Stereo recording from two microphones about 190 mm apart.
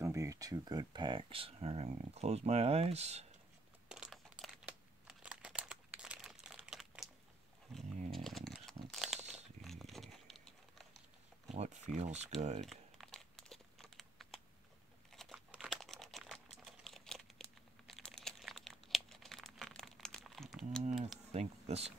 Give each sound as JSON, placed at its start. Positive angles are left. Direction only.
{"t": 0.0, "sound": "speech", "side_deg": -15}
{"t": 3.9, "sound": "crumpling", "side_deg": 0}
{"t": 9.6, "sound": "a sound", "side_deg": 0}
{"t": 11.5, "sound": "a sound", "side_deg": -35}
{"t": 12.0, "sound": "speech", "side_deg": -35}
{"t": 12.6, "sound": "crumpling", "side_deg": 0}
{"t": 21.3, "sound": "bee", "side_deg": -35}